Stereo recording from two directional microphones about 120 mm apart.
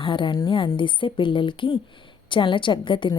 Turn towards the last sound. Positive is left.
turn(degrees=40)  # may be behind; listen again after turning